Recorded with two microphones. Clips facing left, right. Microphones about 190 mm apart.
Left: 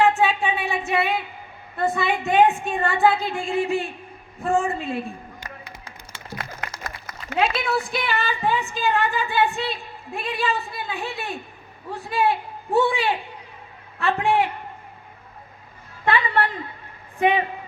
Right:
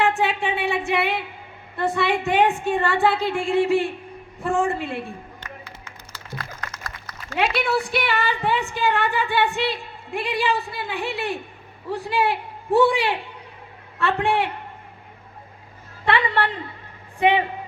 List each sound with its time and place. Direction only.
0.0 s a woman's voice: 70° right (ahead or behind)
5.8 s a sound: 25° left (ahead or behind)
7.3 s a woman's voice: 70° right (ahead or behind)
16.0 s a woman's voice: 70° right (ahead or behind)